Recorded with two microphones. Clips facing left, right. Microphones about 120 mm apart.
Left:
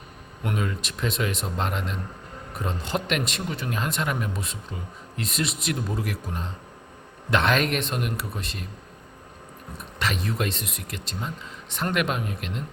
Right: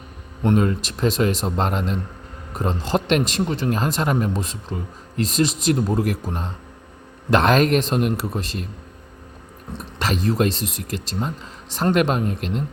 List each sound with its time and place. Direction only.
0.4 s speech: 35° right (ahead or behind)
9.7 s speech: 35° right (ahead or behind)